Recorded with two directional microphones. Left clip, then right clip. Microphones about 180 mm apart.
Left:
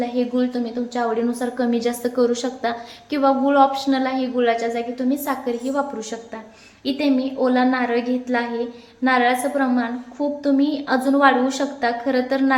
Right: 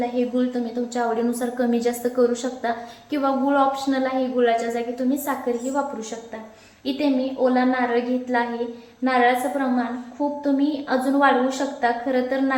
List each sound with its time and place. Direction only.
0.0 s a woman's voice: 30° left (ahead or behind)
6.8 s a woman's voice: 45° left (ahead or behind)